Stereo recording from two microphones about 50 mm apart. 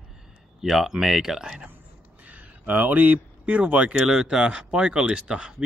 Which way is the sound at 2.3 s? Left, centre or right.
Right.